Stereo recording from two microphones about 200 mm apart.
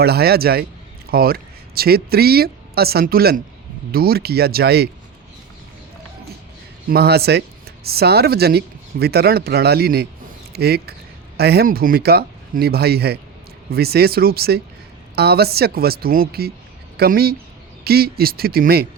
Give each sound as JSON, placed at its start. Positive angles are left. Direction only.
{"t": 0.0, "sound": "speech", "side_deg": -50}
{"t": 6.9, "sound": "speech", "side_deg": -50}